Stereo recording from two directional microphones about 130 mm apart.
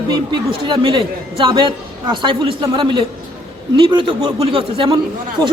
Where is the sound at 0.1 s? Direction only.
40° right (ahead or behind).